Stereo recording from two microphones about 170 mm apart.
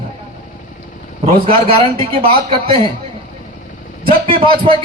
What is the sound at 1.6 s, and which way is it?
Speech, 30° right (ahead or behind).